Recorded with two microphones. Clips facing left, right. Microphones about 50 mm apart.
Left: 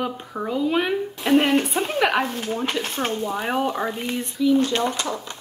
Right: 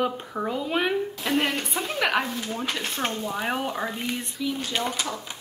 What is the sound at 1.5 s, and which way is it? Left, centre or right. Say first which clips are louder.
Speech: left 8 dB; left.